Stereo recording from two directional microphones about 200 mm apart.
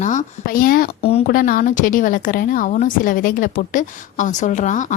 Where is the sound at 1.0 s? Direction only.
30° left (ahead or behind).